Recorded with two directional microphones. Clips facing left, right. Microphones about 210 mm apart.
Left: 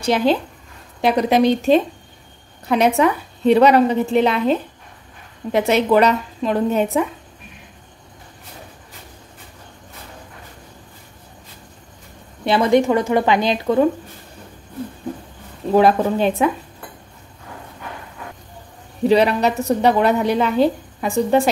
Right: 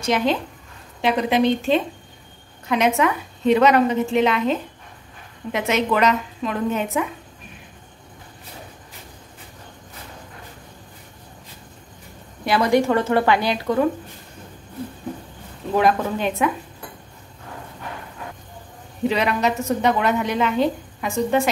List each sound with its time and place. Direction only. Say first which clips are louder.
0.0 s a woman's voice: left 3 dB; 35° left (ahead or behind)
12.4 s a woman's voice: left 3 dB; 25° left (ahead or behind)
15.7 s a woman's voice: left 5 dB; 30° left (ahead or behind)
19.0 s a woman's voice: left 5 dB; 35° left (ahead or behind)